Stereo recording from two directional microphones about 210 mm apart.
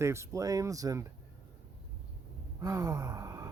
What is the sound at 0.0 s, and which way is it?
Speech, 15° right (ahead or behind).